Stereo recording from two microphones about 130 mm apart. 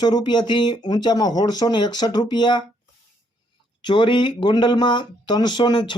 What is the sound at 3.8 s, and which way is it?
Speech, 40° left (ahead or behind).